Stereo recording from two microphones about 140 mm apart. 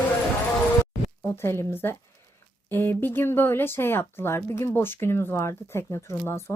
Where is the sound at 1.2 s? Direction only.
15° left (ahead or behind).